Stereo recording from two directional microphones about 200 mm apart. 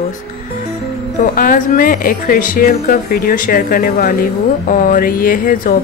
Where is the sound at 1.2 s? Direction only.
45° left (ahead or behind).